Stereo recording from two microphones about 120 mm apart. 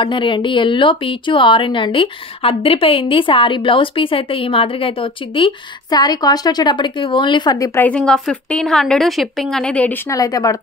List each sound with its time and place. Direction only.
0.0 s speech: 40° left (ahead or behind)
7.8 s a woman's voice: 10° left (ahead or behind)
10.0 s speech: 30° left (ahead or behind)